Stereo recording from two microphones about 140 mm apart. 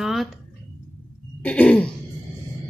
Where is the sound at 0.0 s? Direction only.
Centre (ahead or behind).